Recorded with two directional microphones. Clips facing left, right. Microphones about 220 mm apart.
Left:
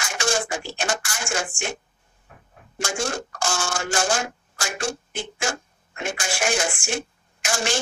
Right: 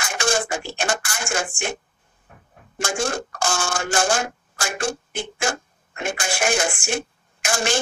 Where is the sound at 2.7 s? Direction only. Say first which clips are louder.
Right 2 dB; 55° right (ahead or behind).